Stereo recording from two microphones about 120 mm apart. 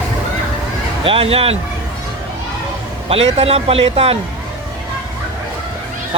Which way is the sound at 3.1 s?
55° right (ahead or behind).